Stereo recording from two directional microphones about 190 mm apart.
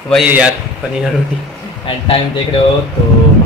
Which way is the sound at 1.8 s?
25° left (ahead or behind).